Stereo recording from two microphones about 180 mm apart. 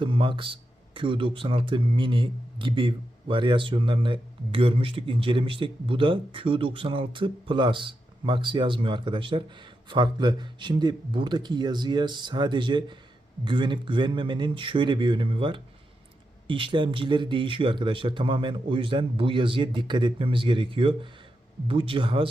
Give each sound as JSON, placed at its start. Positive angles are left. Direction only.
{"t": 0.0, "sound": "speech", "side_deg": -30}